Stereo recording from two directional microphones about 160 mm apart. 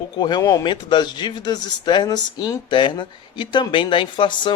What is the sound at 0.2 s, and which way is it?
A man's voice, 25° left (ahead or behind).